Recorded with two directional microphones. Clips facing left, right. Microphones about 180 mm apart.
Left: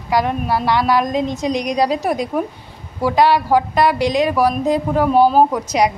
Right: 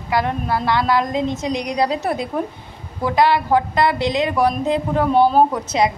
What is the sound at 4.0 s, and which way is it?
Speech, 20° right (ahead or behind).